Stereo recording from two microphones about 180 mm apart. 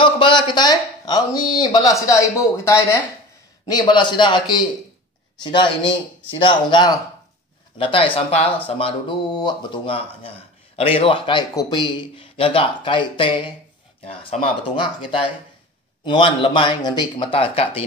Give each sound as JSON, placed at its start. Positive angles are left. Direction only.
{"t": 0.0, "sound": "a man's voice", "side_deg": 25}